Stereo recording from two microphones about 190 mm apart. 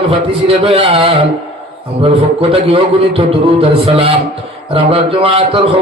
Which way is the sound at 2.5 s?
30° right (ahead or behind).